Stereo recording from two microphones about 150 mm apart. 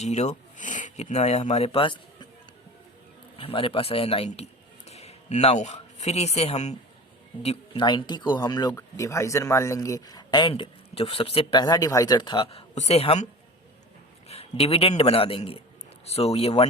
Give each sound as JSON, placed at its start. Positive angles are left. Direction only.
{"t": 0.0, "sound": "speech", "side_deg": 50}
{"t": 3.3, "sound": "a man's voice", "side_deg": 40}
{"t": 14.3, "sound": "a man's voice", "side_deg": 40}